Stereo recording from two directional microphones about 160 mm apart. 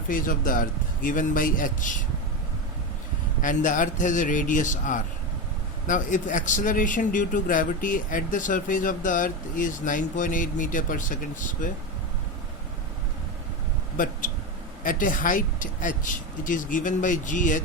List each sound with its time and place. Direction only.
0.1 s speech: 60° left (ahead or behind)
3.4 s a man's voice: 55° left (ahead or behind)
13.9 s a sound: 60° left (ahead or behind)
14.8 s speech: 55° left (ahead or behind)